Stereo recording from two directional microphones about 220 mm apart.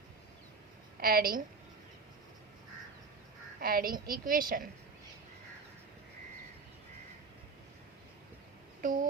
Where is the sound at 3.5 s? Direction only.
40° right (ahead or behind).